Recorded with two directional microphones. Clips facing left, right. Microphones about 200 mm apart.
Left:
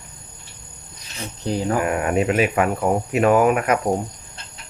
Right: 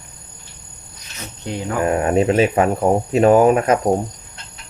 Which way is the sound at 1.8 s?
30° right (ahead or behind).